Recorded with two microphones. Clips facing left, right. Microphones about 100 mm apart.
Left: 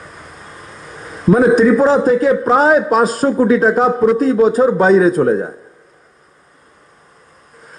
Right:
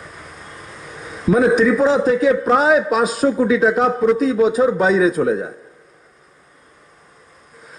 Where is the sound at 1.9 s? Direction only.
Centre (ahead or behind).